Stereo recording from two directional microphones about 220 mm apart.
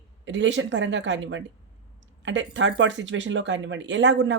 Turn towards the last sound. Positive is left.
turn(degrees=-55)  # may be behind; listen again after turning